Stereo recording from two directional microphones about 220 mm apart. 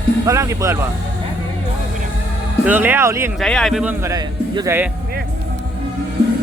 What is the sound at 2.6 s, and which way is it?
Speech, 10° right (ahead or behind).